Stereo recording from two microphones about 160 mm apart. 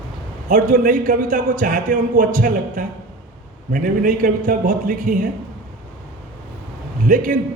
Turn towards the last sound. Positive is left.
turn(degrees=-55)  # may be behind; listen again after turning